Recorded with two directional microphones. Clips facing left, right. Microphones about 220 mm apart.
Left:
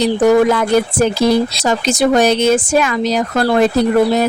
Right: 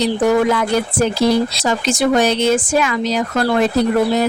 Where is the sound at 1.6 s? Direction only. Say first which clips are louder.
Left 2 dB; 40° left (ahead or behind).